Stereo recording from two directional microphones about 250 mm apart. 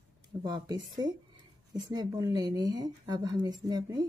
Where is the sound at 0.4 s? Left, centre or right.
Centre.